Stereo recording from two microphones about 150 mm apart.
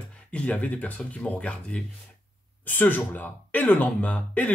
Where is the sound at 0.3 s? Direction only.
10° left (ahead or behind).